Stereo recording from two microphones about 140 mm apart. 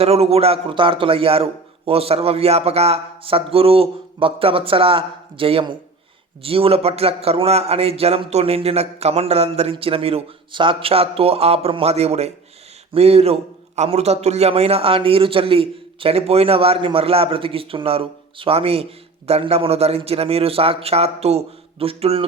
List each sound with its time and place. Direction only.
0.0 s a man's voice: 45° right (ahead or behind)